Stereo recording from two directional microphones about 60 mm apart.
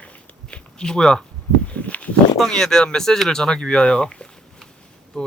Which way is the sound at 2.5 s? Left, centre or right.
Centre.